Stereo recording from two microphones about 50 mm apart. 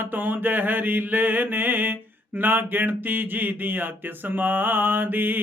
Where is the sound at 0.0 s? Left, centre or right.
Right.